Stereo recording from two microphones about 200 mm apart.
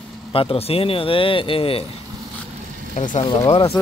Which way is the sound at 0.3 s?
30° left (ahead or behind).